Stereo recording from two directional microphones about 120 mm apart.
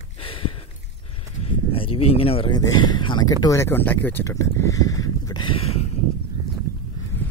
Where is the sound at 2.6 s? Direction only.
40° left (ahead or behind).